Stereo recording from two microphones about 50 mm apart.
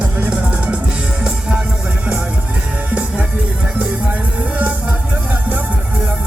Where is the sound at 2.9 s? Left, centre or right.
Right.